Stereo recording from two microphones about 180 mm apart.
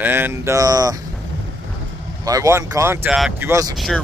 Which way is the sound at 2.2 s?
20° right (ahead or behind).